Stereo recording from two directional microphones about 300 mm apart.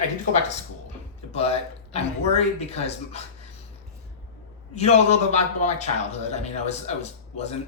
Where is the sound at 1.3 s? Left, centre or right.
Centre.